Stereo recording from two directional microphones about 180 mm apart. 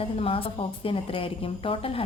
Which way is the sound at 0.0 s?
30° left (ahead or behind).